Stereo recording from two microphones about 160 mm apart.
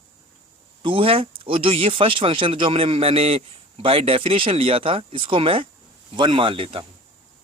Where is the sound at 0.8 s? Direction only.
35° right (ahead or behind).